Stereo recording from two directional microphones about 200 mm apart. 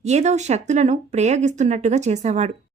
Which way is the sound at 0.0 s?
35° right (ahead or behind).